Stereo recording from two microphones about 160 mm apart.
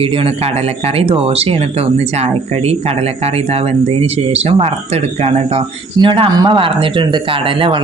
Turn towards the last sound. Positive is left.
turn(degrees=-30)  # may be behind; listen again after turning